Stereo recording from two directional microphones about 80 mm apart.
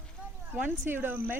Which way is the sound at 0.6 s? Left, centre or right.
Right.